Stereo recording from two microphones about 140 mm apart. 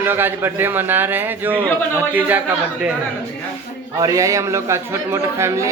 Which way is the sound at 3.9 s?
25° right (ahead or behind).